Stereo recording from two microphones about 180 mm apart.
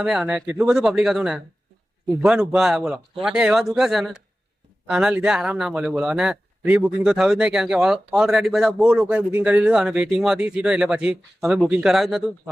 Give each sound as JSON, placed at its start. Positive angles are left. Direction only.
{"t": 0.0, "sound": "speech", "side_deg": -5}